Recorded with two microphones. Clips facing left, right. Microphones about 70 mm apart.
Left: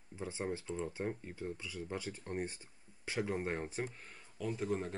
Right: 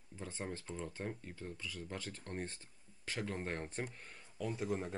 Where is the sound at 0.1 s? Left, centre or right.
Centre.